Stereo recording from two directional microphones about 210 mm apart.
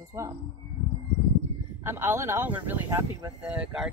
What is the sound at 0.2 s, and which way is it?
Speech, 15° right (ahead or behind).